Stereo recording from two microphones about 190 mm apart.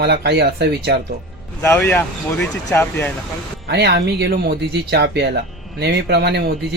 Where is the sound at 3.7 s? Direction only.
60° right (ahead or behind).